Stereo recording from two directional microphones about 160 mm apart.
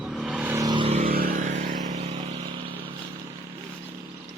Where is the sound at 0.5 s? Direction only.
25° right (ahead or behind).